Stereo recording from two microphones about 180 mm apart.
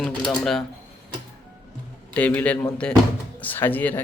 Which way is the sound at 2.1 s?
10° left (ahead or behind).